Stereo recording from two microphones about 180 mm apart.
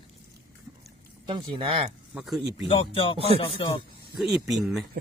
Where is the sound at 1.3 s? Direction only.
30° right (ahead or behind).